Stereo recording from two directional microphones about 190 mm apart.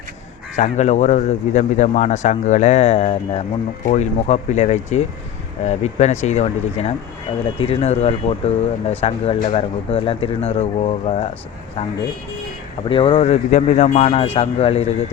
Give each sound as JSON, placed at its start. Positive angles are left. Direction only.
{"t": 0.5, "sound": "speech", "side_deg": 40}
{"t": 12.9, "sound": "speech", "side_deg": 25}